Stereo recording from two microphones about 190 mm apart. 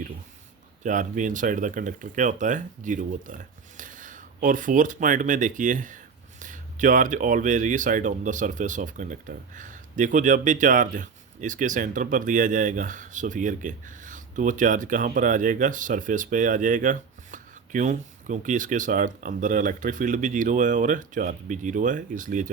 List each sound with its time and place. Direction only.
0.8 s speech: 40° right (ahead or behind)